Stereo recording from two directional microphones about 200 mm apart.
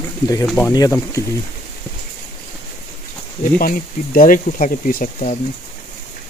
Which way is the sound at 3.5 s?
45° left (ahead or behind).